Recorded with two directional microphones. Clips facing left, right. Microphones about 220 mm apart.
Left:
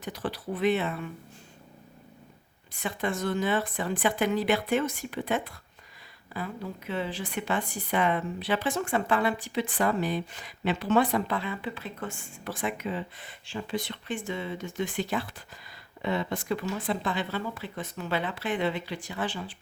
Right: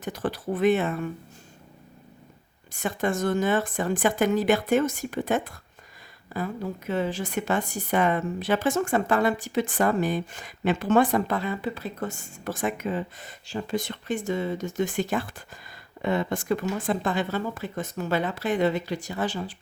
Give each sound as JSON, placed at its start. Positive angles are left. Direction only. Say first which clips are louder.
{"t": 0.0, "sound": "a woman's voice", "louder": "right 4 dB", "side_deg": -50}
{"t": 2.7, "sound": "a woman's voice", "louder": "right 4 dB", "side_deg": -45}